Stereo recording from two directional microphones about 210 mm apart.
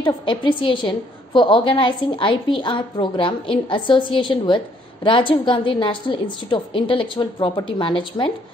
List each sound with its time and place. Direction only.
0.0 s a woman's voice: 25° left (ahead or behind)